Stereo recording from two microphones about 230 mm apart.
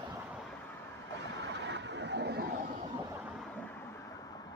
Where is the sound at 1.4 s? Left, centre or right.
Right.